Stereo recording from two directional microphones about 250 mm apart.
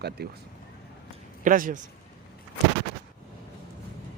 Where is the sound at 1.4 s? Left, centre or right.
Right.